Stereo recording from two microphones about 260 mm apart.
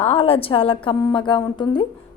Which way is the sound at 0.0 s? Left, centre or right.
Left.